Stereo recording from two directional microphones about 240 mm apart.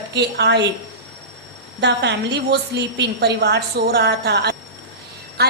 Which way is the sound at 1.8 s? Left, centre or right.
Right.